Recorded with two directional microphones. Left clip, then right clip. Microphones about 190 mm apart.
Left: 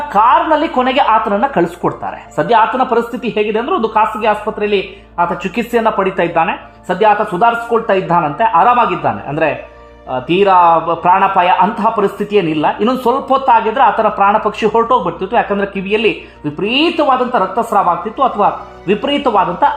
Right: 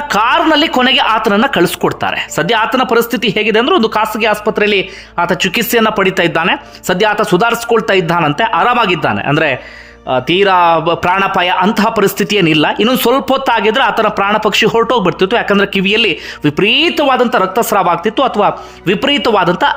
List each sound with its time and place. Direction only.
0.1 s speech: 30° right (ahead or behind)